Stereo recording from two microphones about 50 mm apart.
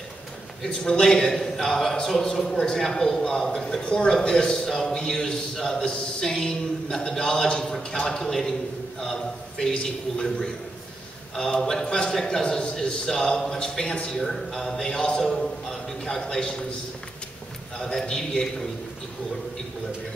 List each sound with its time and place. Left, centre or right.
0.7 s a man's voice: centre
2.8 s a man's voice: centre
11.8 s a woman's voice: centre
14.2 s a man's voice: centre
17.7 s a man's voice: centre